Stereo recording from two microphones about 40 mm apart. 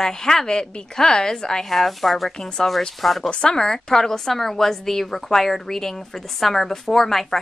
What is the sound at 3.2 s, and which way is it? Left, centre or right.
A woman's voice, centre.